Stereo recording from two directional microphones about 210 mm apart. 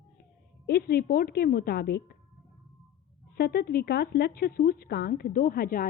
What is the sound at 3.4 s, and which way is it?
A woman's voice, 50° left (ahead or behind).